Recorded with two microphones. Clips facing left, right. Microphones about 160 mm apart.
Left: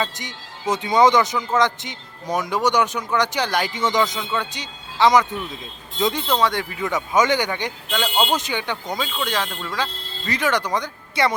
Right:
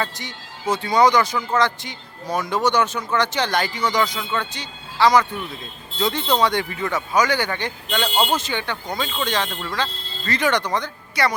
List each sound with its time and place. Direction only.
0.0 s speech: 15° left (ahead or behind)
3.7 s speech: 20° left (ahead or behind)
6.4 s speech: centre (ahead or behind)
6.8 s speech: 20° left (ahead or behind)
9.1 s speech: 5° left (ahead or behind)
11.1 s a woman's voice: 25° left (ahead or behind)